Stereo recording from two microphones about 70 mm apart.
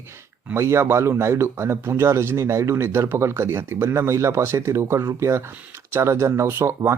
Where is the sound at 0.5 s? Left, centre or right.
Right.